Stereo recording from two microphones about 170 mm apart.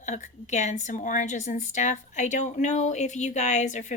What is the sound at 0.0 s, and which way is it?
A woman's voice, 45° left (ahead or behind).